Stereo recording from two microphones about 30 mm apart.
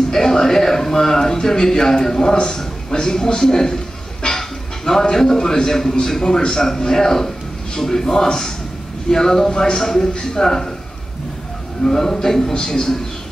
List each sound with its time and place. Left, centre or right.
0.1 s a man's voice: centre
4.2 s music: centre
5.0 s a man's voice: centre
11.8 s a man's voice: centre